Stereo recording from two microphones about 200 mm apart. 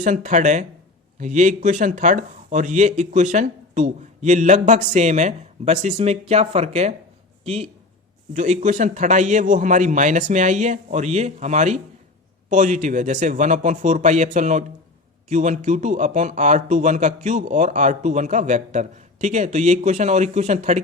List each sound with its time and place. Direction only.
0.0 s speech: 35° right (ahead or behind)